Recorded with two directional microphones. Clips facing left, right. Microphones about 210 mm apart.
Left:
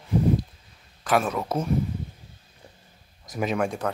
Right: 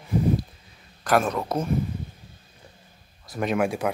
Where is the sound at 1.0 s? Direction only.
5° left (ahead or behind).